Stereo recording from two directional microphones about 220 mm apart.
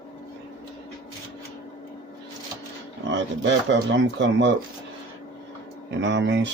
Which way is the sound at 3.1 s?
55° right (ahead or behind).